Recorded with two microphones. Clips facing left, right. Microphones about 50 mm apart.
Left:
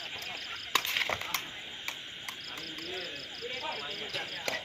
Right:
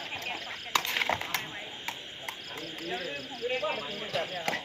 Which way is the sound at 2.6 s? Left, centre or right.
Centre.